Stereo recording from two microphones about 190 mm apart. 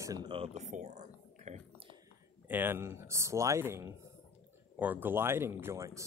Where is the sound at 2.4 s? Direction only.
10° right (ahead or behind).